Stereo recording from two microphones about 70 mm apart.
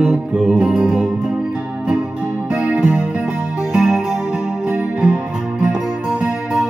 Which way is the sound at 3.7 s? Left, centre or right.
Centre.